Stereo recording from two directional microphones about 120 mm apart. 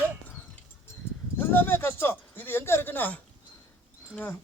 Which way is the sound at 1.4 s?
15° left (ahead or behind).